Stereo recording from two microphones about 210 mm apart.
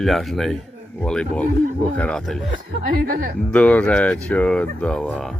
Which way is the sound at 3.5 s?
5° left (ahead or behind).